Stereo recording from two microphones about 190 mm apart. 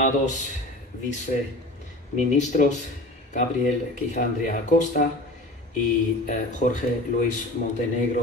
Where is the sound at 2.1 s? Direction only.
40° left (ahead or behind).